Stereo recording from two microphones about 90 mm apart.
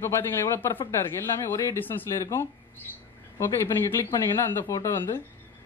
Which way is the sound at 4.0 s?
30° left (ahead or behind).